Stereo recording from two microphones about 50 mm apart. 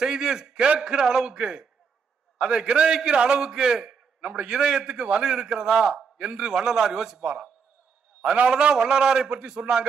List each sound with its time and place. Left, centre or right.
0.0 s a man's voice: centre
4.2 s a man's voice: right
4.5 s a man's voice: centre
5.7 s a man's voice: centre
6.1 s a man's voice: centre
8.5 s a man's voice: centre